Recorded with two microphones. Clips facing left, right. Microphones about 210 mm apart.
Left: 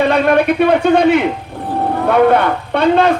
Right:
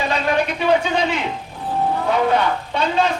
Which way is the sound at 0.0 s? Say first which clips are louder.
Left 8 dB; 60° left (ahead or behind).